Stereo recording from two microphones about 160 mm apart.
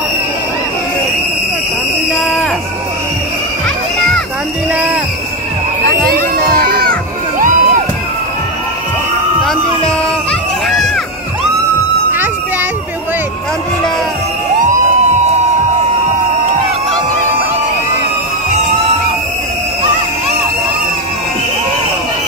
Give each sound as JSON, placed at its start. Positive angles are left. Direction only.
{"t": 2.1, "sound": "music", "side_deg": 0}
{"t": 6.7, "sound": "crowd", "side_deg": -65}
{"t": 9.4, "sound": "music", "side_deg": 0}